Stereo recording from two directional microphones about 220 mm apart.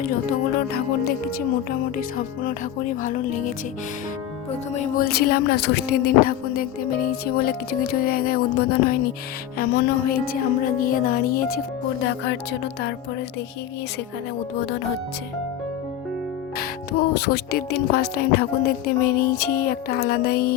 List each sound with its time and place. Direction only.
0.0 s speech: 40° left (ahead or behind)
4.7 s speech: 35° left (ahead or behind)
12.0 s speech: 55° left (ahead or behind)
17.2 s speech: 45° left (ahead or behind)